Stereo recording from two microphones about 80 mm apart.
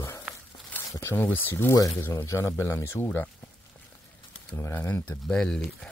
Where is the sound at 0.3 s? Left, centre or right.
Centre.